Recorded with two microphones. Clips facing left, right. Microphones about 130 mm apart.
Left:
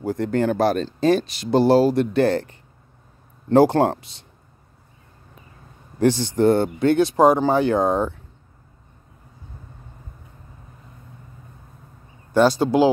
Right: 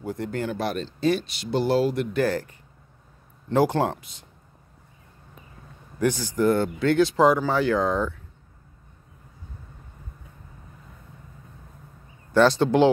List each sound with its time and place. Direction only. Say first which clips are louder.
0.2 s speech: left 9 dB; 45° left (ahead or behind); by 2.5 s 30° left (ahead or behind)
3.5 s speech: left 6 dB; 35° left (ahead or behind)
5.9 s speech: left 5 dB; 30° left (ahead or behind)
12.4 s speech: left 2 dB; 10° left (ahead or behind)